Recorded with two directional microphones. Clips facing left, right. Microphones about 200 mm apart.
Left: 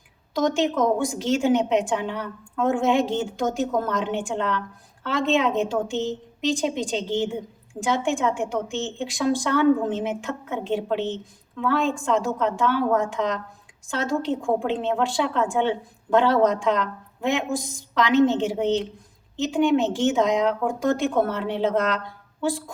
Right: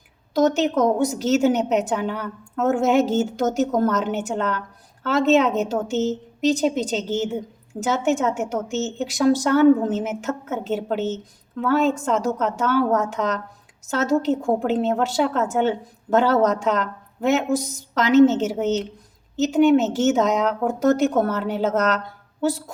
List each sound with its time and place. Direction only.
0.3 s a woman's voice: 40° right (ahead or behind)